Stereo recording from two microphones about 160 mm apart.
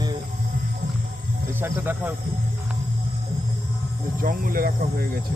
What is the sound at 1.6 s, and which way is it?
Speech, 10° right (ahead or behind).